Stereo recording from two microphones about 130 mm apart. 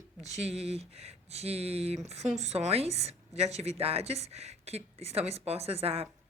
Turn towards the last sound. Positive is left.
turn(degrees=-50)  # may be behind; listen again after turning